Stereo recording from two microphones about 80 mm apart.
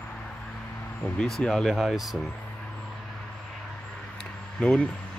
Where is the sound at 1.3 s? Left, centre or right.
Centre.